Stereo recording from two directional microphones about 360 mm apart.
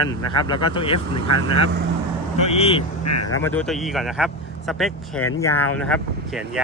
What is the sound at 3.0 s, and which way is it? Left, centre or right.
Speech, left.